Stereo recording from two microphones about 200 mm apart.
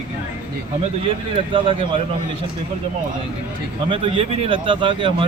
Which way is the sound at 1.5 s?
25° right (ahead or behind).